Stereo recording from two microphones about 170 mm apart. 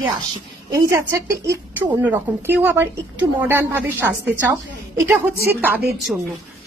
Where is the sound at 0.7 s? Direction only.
20° right (ahead or behind).